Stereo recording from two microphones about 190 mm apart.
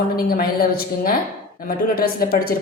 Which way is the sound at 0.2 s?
50° left (ahead or behind).